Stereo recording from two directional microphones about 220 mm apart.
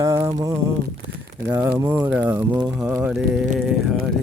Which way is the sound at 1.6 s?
10° right (ahead or behind).